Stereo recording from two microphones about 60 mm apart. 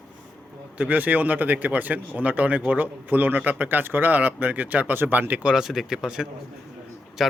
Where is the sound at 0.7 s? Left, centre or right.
Right.